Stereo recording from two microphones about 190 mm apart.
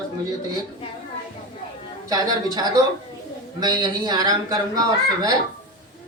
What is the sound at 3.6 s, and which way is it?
Speech, 20° right (ahead or behind).